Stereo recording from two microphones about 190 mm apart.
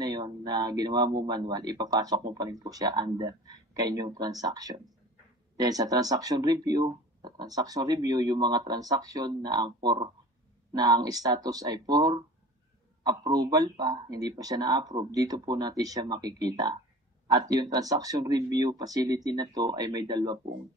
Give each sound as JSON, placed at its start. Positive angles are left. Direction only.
{"t": 0.0, "sound": "a man's voice", "side_deg": -20}